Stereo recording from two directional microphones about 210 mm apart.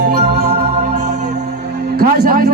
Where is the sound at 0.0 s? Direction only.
35° right (ahead or behind).